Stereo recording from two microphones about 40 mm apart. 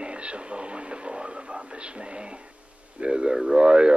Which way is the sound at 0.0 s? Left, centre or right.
Right.